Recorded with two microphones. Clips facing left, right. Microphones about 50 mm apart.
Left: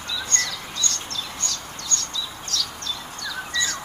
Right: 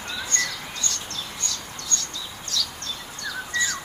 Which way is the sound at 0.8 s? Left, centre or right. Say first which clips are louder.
Left 4 dB; left.